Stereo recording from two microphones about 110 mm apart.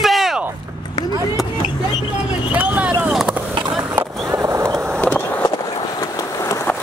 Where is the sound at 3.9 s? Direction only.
25° right (ahead or behind).